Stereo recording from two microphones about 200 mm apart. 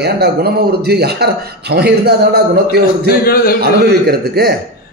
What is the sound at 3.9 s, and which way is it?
Speech, 55° right (ahead or behind).